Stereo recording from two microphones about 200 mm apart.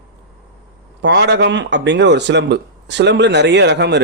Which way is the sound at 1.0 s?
60° right (ahead or behind).